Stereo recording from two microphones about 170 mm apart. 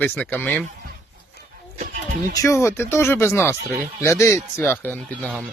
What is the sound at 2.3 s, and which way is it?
Speech, 15° left (ahead or behind).